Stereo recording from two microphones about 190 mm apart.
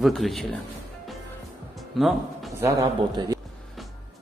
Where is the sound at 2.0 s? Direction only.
Centre (ahead or behind).